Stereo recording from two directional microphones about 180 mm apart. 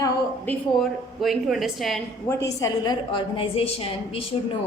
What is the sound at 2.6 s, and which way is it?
A woman's voice, 25° left (ahead or behind).